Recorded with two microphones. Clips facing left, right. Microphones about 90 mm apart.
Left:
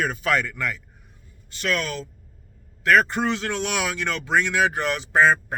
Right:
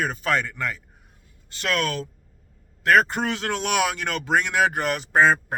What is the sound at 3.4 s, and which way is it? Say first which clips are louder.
Speech: right 3 dB; 50° right (ahead or behind).